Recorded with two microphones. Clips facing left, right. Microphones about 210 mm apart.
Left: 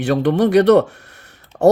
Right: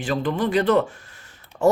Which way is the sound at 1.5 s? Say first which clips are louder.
Left 6 dB; 50° left (ahead or behind).